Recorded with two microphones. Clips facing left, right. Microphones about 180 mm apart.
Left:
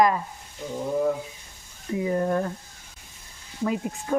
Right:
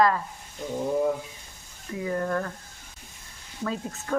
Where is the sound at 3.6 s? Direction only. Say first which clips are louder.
Left 4 dB; 15° left (ahead or behind).